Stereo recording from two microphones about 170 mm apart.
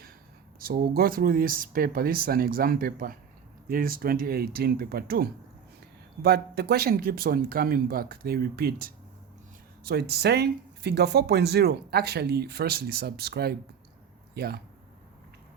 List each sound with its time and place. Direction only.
0.6 s speech: 60° right (ahead or behind)